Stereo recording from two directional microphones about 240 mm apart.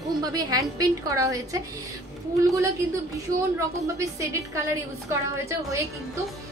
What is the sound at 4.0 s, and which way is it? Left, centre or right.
A woman's voice, centre.